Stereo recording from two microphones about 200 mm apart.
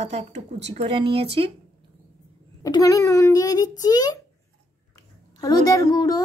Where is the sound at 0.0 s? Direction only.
30° right (ahead or behind).